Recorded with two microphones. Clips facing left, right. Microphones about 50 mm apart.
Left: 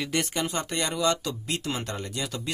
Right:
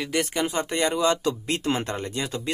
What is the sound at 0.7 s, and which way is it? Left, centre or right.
Speech, right.